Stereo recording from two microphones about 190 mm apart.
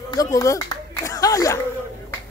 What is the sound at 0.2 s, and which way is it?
Speech, 15° left (ahead or behind).